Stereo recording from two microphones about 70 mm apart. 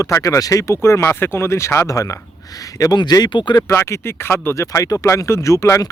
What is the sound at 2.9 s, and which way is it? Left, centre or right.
Speech, left.